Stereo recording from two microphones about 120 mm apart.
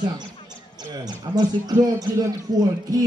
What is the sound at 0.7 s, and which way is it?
A man's voice, 35° right (ahead or behind).